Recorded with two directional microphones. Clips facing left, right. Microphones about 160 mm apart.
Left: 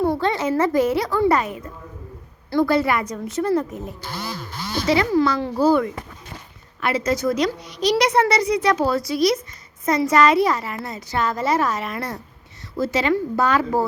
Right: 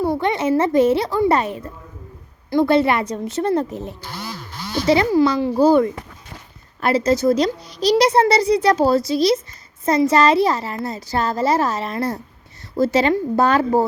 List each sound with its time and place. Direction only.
0.0 s a woman's voice: 15° right (ahead or behind)
5.1 s a woman's voice: 20° right (ahead or behind)
6.7 s a woman's voice: 35° right (ahead or behind)